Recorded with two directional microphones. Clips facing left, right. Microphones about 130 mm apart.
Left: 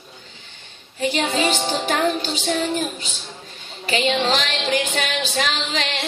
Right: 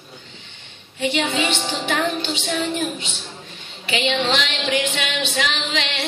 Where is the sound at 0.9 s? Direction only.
40° left (ahead or behind).